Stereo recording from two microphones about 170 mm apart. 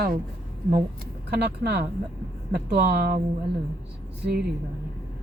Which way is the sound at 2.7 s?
70° right (ahead or behind).